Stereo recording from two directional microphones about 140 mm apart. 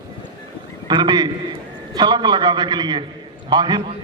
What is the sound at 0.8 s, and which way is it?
A man's voice, 30° right (ahead or behind).